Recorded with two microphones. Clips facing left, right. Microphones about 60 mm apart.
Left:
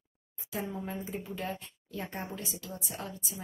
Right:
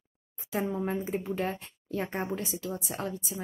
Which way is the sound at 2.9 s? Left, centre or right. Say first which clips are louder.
Right 6 dB; right.